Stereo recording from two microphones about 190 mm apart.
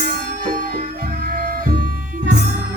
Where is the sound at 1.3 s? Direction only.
45° right (ahead or behind).